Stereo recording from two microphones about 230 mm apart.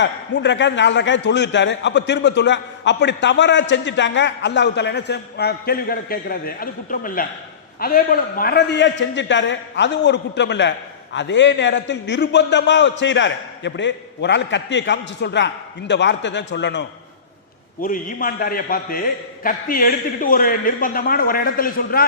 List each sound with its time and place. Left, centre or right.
0.0 s a man's voice: left
17.7 s a man's voice: left